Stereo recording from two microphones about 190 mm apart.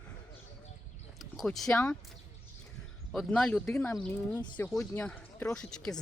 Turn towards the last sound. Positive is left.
turn(degrees=5)  # may be behind; listen again after turning